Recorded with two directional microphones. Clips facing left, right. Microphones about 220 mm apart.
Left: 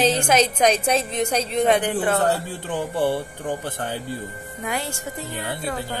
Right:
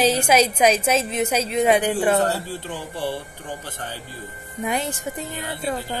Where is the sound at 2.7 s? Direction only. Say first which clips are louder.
Left 8 dB; 55° left (ahead or behind).